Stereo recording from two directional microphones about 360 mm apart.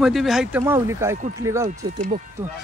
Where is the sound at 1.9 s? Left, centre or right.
Right.